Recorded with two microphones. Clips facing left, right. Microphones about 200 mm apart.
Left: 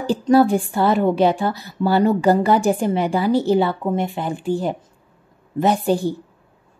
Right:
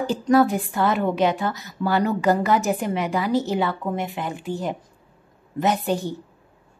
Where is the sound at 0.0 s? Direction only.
30° left (ahead or behind).